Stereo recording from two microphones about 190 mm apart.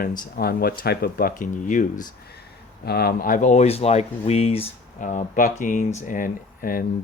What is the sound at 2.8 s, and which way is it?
Speech, 55° left (ahead or behind).